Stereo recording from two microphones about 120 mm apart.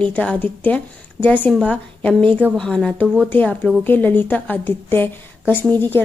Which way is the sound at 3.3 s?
15° left (ahead or behind).